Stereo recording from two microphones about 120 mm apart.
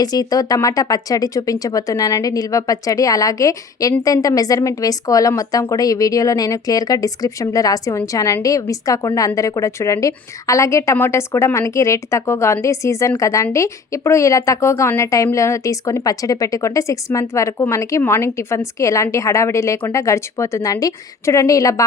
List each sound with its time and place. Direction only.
0.0 s speech: 30° left (ahead or behind)